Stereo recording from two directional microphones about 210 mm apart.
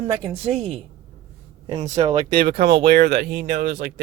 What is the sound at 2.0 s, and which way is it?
Speech, 30° right (ahead or behind).